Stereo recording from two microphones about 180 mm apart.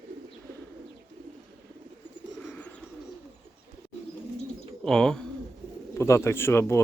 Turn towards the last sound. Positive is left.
turn(degrees=15)  # may be behind; listen again after turning